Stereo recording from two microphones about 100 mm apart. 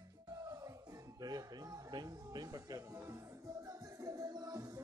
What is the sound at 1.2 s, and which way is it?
Music, 40° right (ahead or behind).